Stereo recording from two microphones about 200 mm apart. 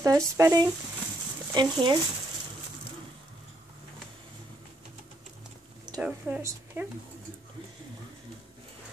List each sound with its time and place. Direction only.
0.0 s speech: 15° right (ahead or behind)
5.9 s speech: 5° right (ahead or behind)